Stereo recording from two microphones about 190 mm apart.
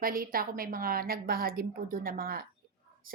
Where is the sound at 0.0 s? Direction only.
50° right (ahead or behind).